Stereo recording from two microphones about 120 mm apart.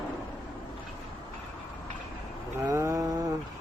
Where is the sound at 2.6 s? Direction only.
25° right (ahead or behind).